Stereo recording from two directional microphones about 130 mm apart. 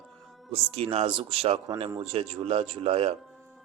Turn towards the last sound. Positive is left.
turn(degrees=-50)  # may be behind; listen again after turning